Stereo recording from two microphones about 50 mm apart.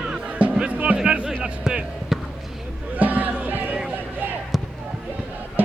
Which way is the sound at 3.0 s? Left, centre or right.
Right.